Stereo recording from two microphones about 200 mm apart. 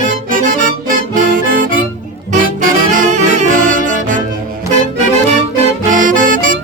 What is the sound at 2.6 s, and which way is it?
Saxophone, 40° right (ahead or behind).